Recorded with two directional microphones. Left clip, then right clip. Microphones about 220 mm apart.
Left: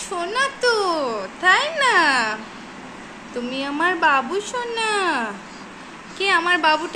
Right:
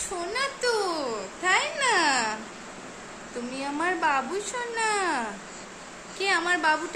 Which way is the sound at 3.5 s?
10° right (ahead or behind).